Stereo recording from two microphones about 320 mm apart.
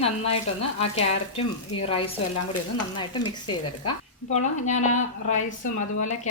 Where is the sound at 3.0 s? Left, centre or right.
Centre.